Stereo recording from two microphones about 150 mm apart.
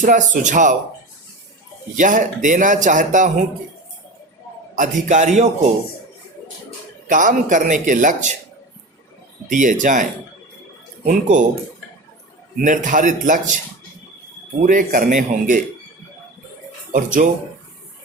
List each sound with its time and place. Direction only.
0.0 s speech: 55° right (ahead or behind)
2.0 s speech: 60° right (ahead or behind)
4.7 s a man's voice: 55° right (ahead or behind)
7.1 s speech: 60° right (ahead or behind)
9.5 s speech: 55° right (ahead or behind)
12.6 s speech: 60° right (ahead or behind)
14.6 s speech: 60° right (ahead or behind)